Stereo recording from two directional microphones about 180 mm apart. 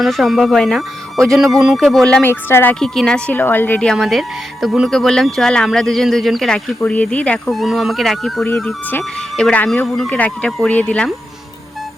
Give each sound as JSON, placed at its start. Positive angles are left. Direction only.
{"t": 0.0, "sound": "speech", "side_deg": 0}